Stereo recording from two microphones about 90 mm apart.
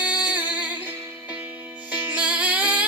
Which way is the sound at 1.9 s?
15° right (ahead or behind).